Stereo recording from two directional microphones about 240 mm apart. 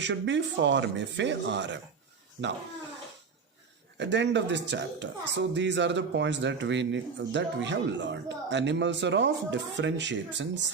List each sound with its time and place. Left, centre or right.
0.0 s speech: right
3.9 s speech: right